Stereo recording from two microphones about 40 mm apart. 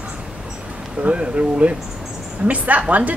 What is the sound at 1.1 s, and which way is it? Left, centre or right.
A woman's voice, right.